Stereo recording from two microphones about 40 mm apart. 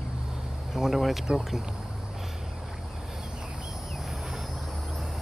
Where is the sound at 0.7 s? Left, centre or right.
Centre.